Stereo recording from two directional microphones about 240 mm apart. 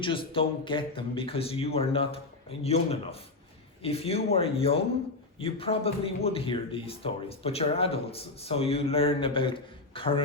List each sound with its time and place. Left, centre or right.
0.0 s speech: left